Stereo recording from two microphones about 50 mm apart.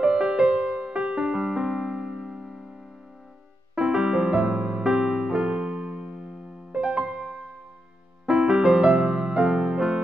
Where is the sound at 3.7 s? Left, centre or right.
Centre.